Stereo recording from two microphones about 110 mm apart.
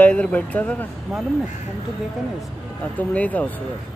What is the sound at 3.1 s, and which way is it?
Speech, 15° left (ahead or behind).